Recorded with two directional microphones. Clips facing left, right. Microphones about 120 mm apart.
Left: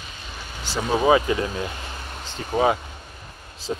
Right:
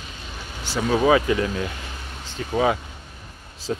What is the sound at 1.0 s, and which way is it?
Speech, 25° left (ahead or behind).